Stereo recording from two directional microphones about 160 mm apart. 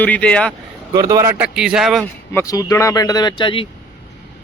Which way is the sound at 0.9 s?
20° right (ahead or behind).